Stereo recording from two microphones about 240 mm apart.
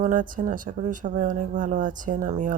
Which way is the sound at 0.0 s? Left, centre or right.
Right.